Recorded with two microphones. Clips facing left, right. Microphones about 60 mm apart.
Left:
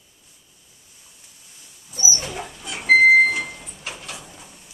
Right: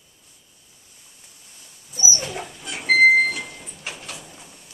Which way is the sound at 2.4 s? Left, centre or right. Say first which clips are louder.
Left 1 dB; centre.